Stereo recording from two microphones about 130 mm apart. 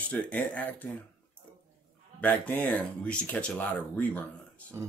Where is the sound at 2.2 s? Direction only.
10° left (ahead or behind).